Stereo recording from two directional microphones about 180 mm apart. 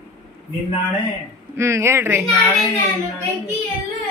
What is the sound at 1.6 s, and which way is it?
Speech, 15° right (ahead or behind).